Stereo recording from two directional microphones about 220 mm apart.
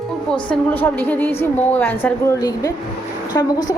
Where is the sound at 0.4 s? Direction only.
5° left (ahead or behind).